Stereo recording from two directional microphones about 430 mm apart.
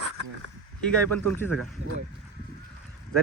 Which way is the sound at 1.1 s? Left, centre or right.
Right.